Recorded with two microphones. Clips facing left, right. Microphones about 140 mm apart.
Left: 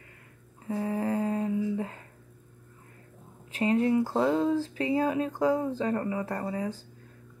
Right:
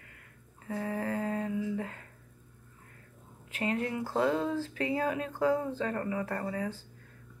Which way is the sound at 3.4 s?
25° left (ahead or behind).